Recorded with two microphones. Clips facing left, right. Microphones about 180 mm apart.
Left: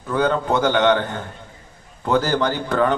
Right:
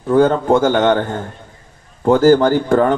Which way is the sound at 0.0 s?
45° right (ahead or behind).